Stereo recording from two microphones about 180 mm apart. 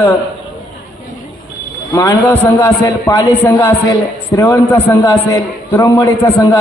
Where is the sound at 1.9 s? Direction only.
15° left (ahead or behind).